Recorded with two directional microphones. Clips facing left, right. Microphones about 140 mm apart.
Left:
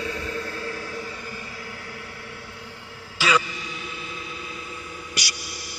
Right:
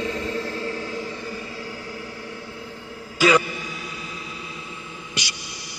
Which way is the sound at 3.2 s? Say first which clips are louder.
Right 5 dB; 50° right (ahead or behind).